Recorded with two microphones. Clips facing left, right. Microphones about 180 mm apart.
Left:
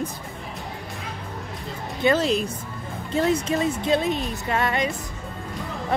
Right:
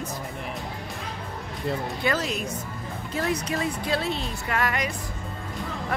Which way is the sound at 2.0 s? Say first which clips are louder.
Left 9 dB; 30° left (ahead or behind).